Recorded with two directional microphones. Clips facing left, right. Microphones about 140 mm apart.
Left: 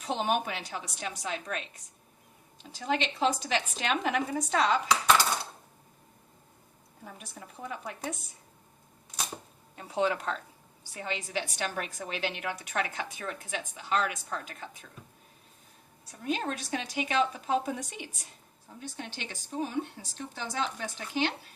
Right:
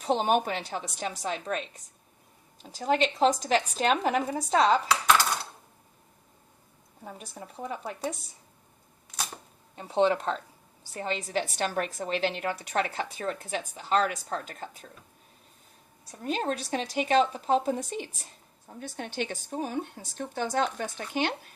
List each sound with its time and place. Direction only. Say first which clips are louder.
0.0 s a woman's voice: right 5 dB; 40° right (ahead or behind)
7.0 s a woman's voice: right 4 dB; 30° right (ahead or behind)
9.7 s a woman's voice: right 5 dB; 30° right (ahead or behind)
16.2 s a woman's voice: right 2 dB; 40° right (ahead or behind)
18.8 s a woman's voice: right 7 dB; 50° right (ahead or behind)